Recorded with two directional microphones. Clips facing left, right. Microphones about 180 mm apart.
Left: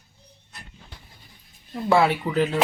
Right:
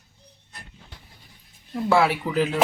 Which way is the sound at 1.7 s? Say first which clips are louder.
Left 1 dB; centre (ahead or behind).